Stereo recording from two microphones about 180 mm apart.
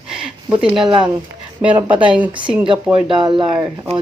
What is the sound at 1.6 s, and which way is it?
Speech, 5° right (ahead or behind).